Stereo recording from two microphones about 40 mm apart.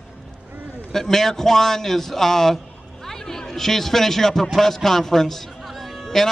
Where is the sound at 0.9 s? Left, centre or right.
Centre.